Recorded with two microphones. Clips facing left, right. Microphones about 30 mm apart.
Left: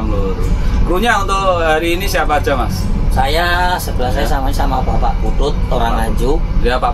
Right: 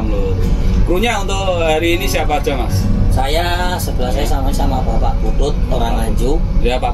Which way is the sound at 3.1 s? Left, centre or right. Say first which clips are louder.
Left 5 dB; centre.